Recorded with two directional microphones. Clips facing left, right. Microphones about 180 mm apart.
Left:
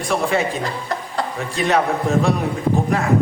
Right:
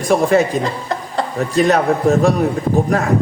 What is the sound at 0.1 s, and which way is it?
A man's voice, 45° right (ahead or behind).